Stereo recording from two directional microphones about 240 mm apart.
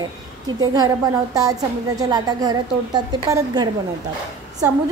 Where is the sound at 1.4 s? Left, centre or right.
Centre.